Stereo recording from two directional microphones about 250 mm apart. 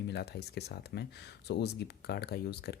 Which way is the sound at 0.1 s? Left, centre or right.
Left.